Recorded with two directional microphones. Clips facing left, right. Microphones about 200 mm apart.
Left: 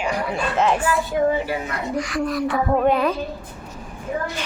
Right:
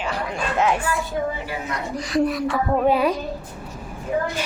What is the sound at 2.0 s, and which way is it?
Speech, 35° right (ahead or behind).